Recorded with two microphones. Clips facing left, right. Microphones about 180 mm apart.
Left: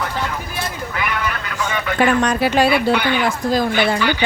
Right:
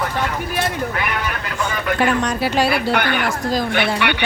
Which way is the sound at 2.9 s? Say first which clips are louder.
Left 1 dB; 55° right (ahead or behind).